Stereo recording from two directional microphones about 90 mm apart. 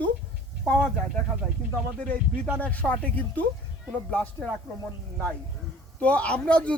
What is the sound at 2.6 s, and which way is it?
Speech, 15° left (ahead or behind).